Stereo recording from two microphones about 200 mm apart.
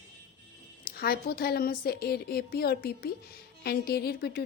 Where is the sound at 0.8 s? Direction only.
50° left (ahead or behind).